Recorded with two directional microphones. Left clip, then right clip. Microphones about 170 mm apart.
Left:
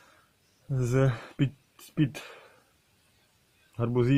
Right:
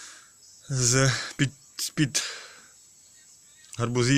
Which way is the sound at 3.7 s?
15° right (ahead or behind).